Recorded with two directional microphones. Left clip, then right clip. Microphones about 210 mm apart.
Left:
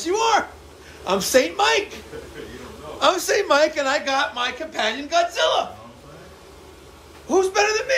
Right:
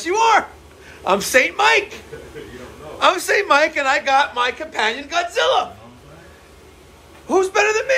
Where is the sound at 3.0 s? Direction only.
15° left (ahead or behind).